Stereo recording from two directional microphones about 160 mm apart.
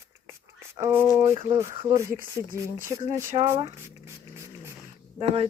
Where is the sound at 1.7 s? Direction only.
35° right (ahead or behind).